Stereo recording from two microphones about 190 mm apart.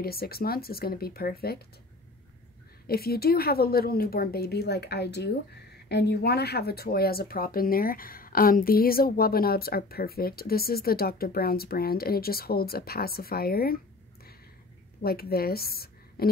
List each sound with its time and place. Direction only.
0.0 s speech: 55° left (ahead or behind)
2.9 s a woman's voice: 55° left (ahead or behind)
15.0 s a woman's voice: 55° left (ahead or behind)